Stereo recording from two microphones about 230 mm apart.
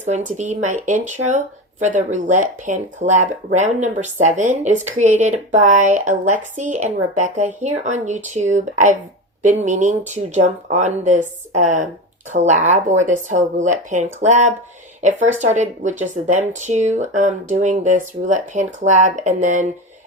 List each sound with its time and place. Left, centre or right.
0.3 s speech: right